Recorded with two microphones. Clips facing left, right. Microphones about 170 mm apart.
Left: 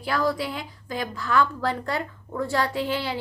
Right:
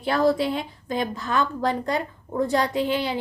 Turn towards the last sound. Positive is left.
turn(degrees=-20)  # may be behind; listen again after turning